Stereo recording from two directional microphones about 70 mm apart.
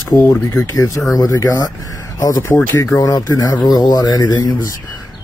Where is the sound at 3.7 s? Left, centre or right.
Left.